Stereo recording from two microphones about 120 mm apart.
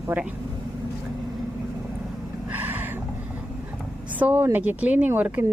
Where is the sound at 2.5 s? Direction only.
15° right (ahead or behind).